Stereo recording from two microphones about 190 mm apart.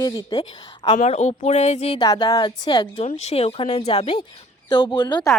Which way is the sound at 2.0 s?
25° left (ahead or behind).